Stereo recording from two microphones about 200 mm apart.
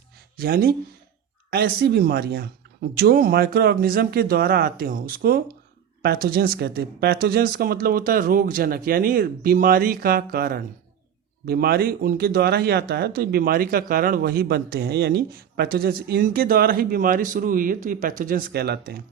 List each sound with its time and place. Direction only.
0.3 s speech: 50° right (ahead or behind)